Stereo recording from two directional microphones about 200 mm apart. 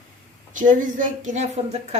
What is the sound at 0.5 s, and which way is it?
A woman's voice, 40° right (ahead or behind).